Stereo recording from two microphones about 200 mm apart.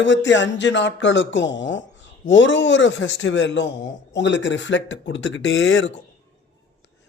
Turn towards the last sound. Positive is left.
turn(degrees=70)  # may be behind; listen again after turning